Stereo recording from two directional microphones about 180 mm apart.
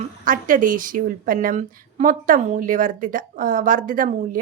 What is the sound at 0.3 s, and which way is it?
A woman's voice, 50° right (ahead or behind).